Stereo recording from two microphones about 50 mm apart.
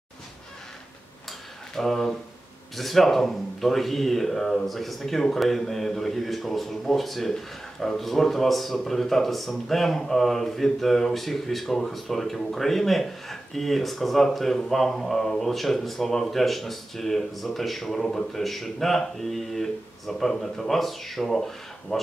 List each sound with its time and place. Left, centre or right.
1.8 s speech: centre